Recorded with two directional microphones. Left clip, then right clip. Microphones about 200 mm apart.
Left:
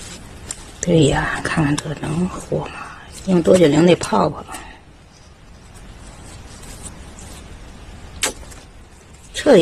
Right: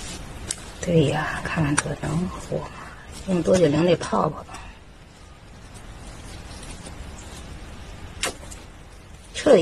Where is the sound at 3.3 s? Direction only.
50° left (ahead or behind).